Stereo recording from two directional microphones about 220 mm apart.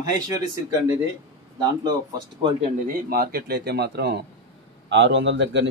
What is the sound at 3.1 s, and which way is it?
A man's voice, 40° right (ahead or behind).